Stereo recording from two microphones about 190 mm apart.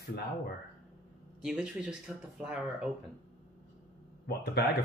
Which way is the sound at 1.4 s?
5° right (ahead or behind).